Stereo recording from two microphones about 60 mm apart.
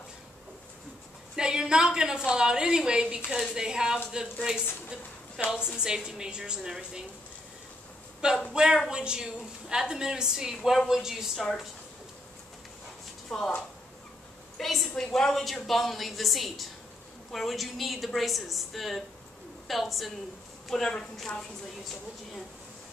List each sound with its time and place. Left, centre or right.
1.3 s a woman's voice: centre
8.2 s a woman's voice: centre
13.3 s a woman's voice: centre
14.6 s a woman's voice: centre